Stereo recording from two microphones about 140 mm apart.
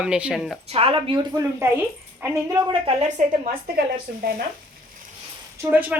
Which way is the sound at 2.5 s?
30° right (ahead or behind).